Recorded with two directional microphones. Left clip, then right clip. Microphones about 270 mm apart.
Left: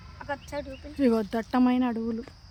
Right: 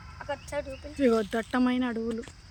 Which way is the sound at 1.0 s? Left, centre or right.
Centre.